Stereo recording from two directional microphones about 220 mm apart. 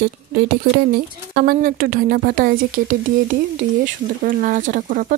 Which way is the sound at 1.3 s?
40° right (ahead or behind).